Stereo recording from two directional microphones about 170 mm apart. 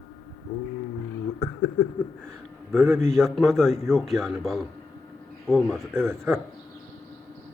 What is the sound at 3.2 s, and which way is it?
A man's voice, centre (ahead or behind).